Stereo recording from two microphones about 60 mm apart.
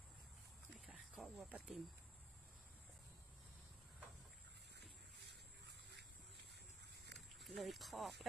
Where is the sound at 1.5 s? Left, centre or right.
Right.